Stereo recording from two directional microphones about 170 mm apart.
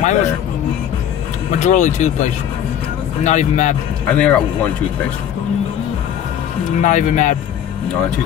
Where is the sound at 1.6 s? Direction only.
45° left (ahead or behind).